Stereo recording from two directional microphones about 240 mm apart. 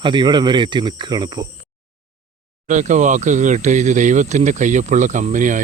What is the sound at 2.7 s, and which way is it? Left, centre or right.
Speech, right.